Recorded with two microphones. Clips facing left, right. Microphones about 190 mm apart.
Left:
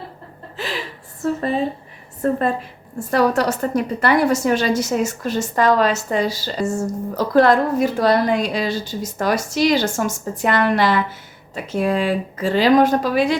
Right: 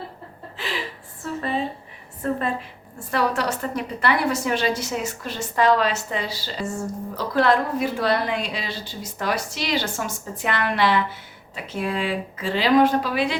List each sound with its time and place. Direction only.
1.2 s a woman's voice: 40° left (ahead or behind)